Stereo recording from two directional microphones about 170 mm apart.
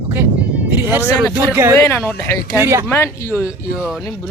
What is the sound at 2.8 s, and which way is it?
Speech, 15° left (ahead or behind).